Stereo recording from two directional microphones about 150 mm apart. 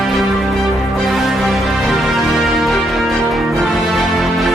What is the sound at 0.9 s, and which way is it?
Music, centre (ahead or behind).